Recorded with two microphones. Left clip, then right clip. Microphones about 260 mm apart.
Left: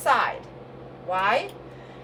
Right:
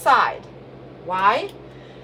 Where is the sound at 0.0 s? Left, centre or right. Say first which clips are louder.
Right 5 dB; centre.